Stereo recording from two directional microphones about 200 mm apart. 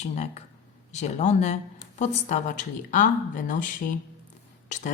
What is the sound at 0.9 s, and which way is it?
Speech, 35° left (ahead or behind).